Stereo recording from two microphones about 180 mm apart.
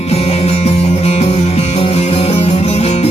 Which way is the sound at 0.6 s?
35° left (ahead or behind).